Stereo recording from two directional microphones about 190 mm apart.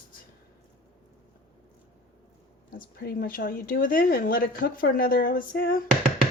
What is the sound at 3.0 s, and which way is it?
Speech, 55° left (ahead or behind).